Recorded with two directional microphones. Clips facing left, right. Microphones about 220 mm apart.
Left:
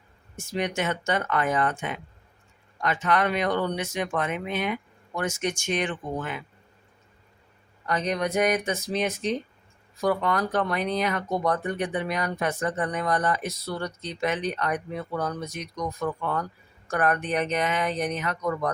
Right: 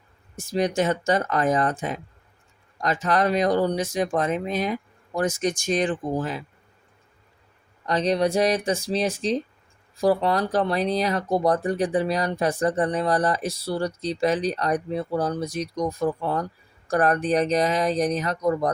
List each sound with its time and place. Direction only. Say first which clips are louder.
0.3 s speech: right 5 dB; 35° right (ahead or behind)
7.9 s speech: right 5 dB; 30° right (ahead or behind)